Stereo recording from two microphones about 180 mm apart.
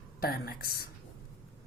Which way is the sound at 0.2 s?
55° left (ahead or behind).